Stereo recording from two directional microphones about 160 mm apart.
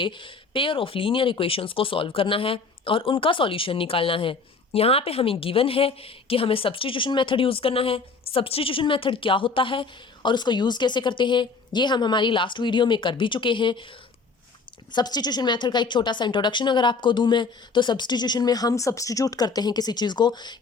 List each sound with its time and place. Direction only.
0.0 s speech: 30° left (ahead or behind)
14.9 s a woman's voice: 25° left (ahead or behind)